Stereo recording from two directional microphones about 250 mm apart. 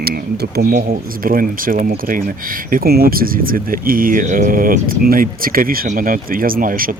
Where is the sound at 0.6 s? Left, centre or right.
Right.